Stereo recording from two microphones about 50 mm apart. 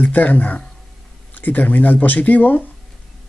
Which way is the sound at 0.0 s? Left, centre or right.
Left.